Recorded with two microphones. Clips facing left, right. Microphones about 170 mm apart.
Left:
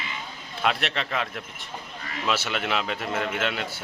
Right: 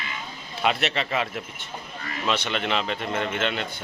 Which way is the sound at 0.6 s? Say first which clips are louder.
Right 2 dB; centre (ahead or behind).